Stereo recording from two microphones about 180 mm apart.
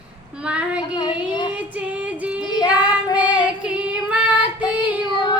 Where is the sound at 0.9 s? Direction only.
25° left (ahead or behind).